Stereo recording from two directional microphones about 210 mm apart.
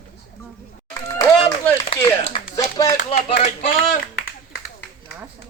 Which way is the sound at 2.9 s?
35° left (ahead or behind).